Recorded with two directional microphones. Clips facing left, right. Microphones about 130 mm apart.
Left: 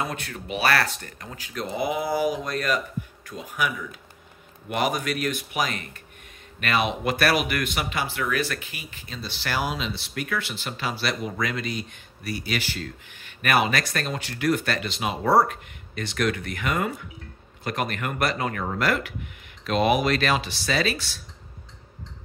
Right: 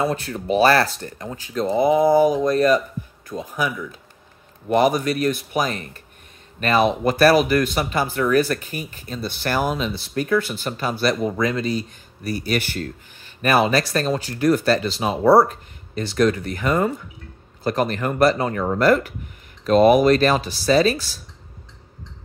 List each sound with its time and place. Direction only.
0.0 s speech: 35° right (ahead or behind); by 12.9 s 50° right (ahead or behind)
13.2 s speech: 35° right (ahead or behind)
18.9 s speech: 40° right (ahead or behind)